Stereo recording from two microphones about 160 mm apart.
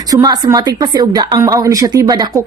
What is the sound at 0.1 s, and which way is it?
Speech, 25° right (ahead or behind).